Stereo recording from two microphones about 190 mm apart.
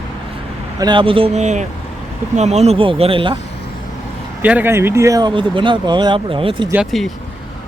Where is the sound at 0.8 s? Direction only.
25° right (ahead or behind).